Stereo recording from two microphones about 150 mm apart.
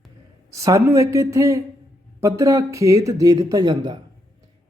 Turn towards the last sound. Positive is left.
turn(degrees=-30)  # may be behind; listen again after turning